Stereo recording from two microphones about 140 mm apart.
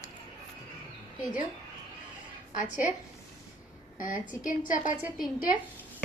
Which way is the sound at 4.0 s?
70° left (ahead or behind).